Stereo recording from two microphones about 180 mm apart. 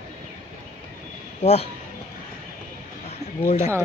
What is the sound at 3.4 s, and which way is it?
Speech, 40° left (ahead or behind).